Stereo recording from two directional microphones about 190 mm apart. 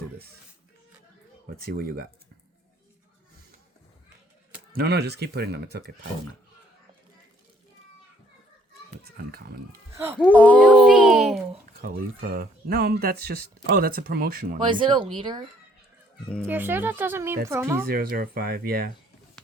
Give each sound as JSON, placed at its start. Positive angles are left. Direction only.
{"t": 1.5, "sound": "speech", "side_deg": -50}
{"t": 4.7, "sound": "speech", "side_deg": -60}
{"t": 9.1, "sound": "speech", "side_deg": -55}
{"t": 10.2, "sound": "speech", "side_deg": 10}
{"t": 10.6, "sound": "a child's voice", "side_deg": -5}
{"t": 11.8, "sound": "speech", "side_deg": -50}
{"t": 14.7, "sound": "speech", "side_deg": -25}
{"t": 16.5, "sound": "speech", "side_deg": -10}
{"t": 17.8, "sound": "speech", "side_deg": -50}